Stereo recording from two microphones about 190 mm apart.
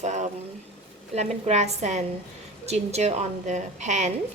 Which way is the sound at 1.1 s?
35° right (ahead or behind).